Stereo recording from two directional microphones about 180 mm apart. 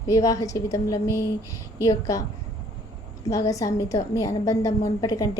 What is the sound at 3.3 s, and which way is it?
A woman's voice, 20° left (ahead or behind).